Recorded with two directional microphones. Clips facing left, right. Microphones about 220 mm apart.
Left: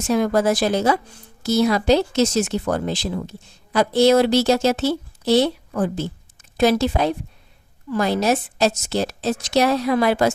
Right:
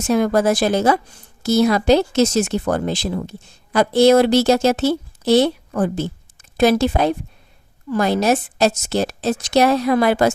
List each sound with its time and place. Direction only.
0.1 s a woman's voice: 50° right (ahead or behind)